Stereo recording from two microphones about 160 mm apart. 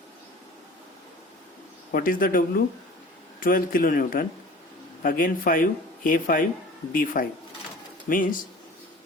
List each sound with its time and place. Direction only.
1.9 s speech: 60° left (ahead or behind)